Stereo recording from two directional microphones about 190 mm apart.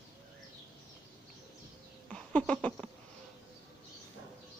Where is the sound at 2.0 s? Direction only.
5° left (ahead or behind).